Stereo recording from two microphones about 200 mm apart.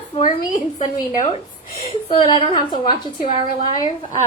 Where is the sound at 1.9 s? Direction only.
25° left (ahead or behind).